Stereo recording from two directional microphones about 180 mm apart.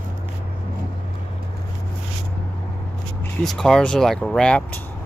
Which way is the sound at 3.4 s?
Centre (ahead or behind).